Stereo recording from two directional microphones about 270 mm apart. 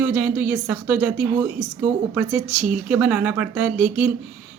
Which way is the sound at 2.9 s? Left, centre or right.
Centre.